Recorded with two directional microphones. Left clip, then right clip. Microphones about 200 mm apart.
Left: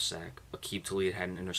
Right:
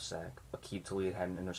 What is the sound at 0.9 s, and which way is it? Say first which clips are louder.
Speech: left 3 dB; 20° left (ahead or behind).